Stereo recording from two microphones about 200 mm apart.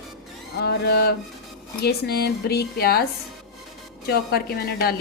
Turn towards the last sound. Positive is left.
turn(degrees=50)  # may be behind; listen again after turning